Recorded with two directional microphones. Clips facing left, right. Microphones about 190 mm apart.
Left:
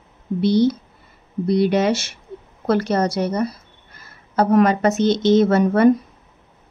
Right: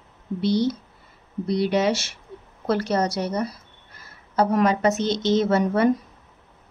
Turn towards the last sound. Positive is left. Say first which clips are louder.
# left 5 dB
turn(degrees=55)  # may be behind; listen again after turning